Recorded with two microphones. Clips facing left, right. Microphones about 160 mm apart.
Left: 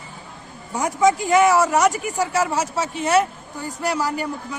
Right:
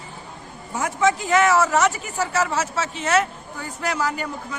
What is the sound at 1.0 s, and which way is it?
Speech, 40° left (ahead or behind).